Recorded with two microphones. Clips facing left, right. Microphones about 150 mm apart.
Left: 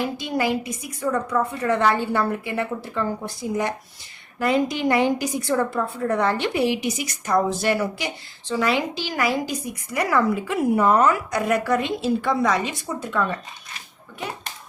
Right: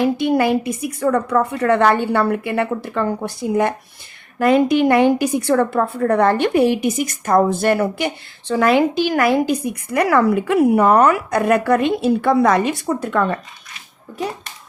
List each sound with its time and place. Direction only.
0.0 s a woman's voice: 60° right (ahead or behind)